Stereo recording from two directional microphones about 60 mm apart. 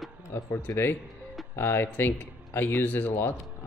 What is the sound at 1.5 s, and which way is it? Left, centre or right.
Speech, left.